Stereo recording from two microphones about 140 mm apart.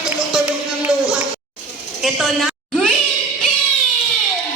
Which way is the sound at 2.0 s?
Centre (ahead or behind).